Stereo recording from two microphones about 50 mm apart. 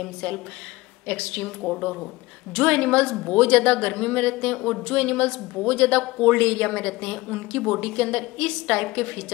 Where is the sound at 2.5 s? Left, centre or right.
Centre.